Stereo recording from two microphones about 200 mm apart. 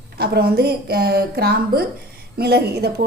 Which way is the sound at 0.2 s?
50° right (ahead or behind).